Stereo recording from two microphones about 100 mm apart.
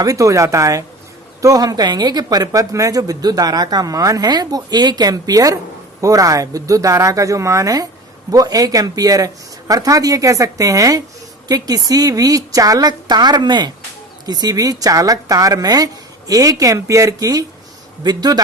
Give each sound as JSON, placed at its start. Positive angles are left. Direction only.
{"t": 0.0, "sound": "a man's voice", "side_deg": -35}